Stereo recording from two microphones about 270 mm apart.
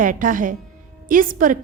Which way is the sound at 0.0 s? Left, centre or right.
Right.